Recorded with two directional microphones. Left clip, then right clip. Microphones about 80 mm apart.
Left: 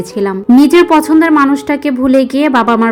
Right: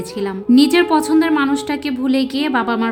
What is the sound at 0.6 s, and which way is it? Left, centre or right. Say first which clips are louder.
A woman's voice: left 7 dB; left.